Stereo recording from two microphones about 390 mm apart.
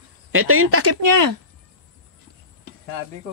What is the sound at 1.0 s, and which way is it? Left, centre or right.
Speech, right.